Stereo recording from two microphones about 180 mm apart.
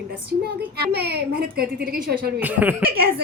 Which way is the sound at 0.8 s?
60° right (ahead or behind).